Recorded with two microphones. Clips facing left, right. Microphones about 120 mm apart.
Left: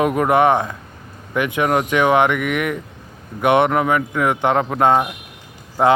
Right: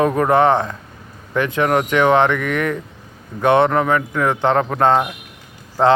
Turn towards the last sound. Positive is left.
turn(degrees=10)  # may be behind; listen again after turning